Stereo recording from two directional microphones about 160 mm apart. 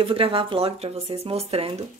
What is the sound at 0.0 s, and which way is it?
Speech, 35° right (ahead or behind).